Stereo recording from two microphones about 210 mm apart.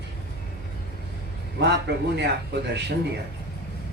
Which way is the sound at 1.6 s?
55° right (ahead or behind).